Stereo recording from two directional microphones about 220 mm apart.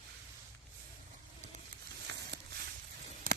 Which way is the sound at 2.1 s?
55° right (ahead or behind).